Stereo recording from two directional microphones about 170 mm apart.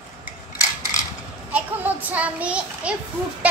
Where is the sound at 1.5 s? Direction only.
10° right (ahead or behind).